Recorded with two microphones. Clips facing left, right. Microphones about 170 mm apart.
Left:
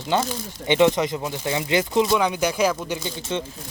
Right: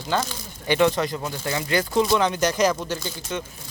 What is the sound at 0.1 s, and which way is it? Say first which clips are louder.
Speech: left 3 dB; 20° left (ahead or behind).